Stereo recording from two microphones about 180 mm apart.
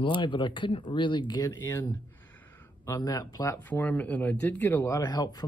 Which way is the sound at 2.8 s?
20° left (ahead or behind).